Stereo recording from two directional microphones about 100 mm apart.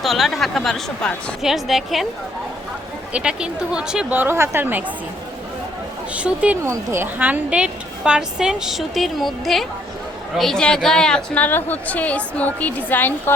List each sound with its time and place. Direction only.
0.0 s a woman's voice: centre (ahead or behind)
3.1 s a woman's voice: 10° right (ahead or behind)
4.2 s a woman's voice: 25° right (ahead or behind)
6.1 s a woman's voice: 15° right (ahead or behind)
6.7 s a woman's voice: 25° right (ahead or behind); by 13.3 s 20° left (ahead or behind)